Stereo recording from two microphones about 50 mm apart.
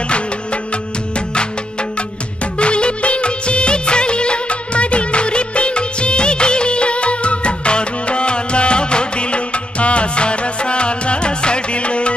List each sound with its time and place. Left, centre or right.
1.1 s music: centre
2.6 s music of bollywood: left